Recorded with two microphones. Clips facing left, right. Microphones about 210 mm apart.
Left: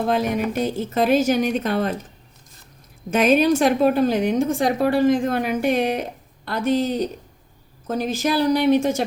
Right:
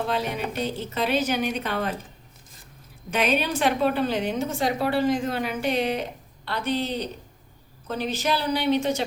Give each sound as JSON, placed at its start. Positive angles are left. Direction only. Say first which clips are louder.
{"t": 0.1, "sound": "a woman's voice", "louder": "left 6 dB", "side_deg": 45}
{"t": 3.1, "sound": "a woman's voice", "louder": "left 8 dB", "side_deg": 45}